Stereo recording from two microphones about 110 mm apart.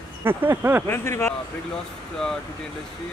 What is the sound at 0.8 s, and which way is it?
Speech, 25° left (ahead or behind).